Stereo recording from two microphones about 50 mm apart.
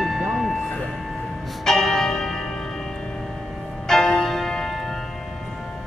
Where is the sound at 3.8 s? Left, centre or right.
Centre.